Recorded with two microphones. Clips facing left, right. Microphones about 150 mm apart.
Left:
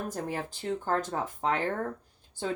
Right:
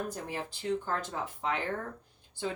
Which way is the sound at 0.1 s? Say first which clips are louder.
Left 4 dB; 45° left (ahead or behind).